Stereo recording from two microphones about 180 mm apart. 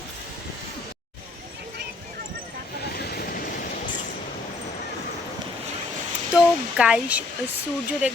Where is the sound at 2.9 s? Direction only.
60° left (ahead or behind).